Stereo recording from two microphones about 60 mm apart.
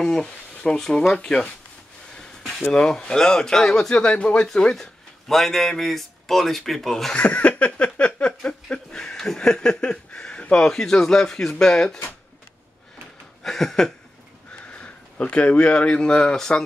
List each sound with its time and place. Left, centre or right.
0.0 s speech: centre
2.7 s speech: centre
7.2 s a sound: left
11.6 s speech: centre
13.4 s a sound: centre
14.5 s speech: centre